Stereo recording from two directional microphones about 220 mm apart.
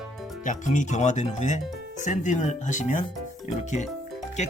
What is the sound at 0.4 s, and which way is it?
Speech, 35° left (ahead or behind).